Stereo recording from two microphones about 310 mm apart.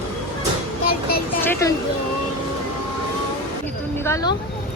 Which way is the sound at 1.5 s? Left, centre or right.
Centre.